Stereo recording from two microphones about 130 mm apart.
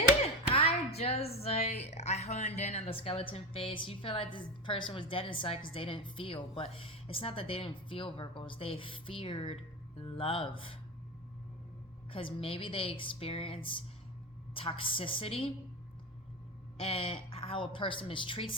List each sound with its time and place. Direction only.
0.5 s speech: 50° left (ahead or behind)
12.1 s speech: 45° left (ahead or behind)
16.7 s speech: 50° left (ahead or behind)